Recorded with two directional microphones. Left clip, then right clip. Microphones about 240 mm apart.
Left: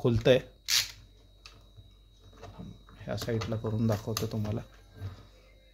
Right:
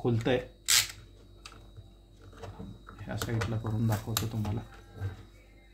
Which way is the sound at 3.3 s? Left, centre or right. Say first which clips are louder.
Left 3 dB; left.